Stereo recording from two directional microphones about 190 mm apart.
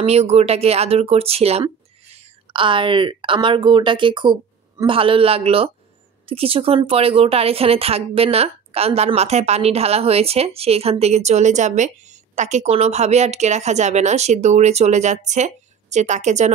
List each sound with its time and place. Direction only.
0.0 s speech: 35° right (ahead or behind)